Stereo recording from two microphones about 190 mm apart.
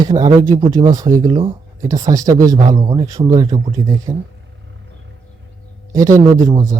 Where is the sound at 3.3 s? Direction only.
20° right (ahead or behind).